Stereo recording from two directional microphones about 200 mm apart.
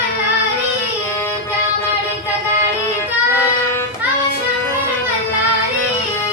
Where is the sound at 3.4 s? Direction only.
15° left (ahead or behind).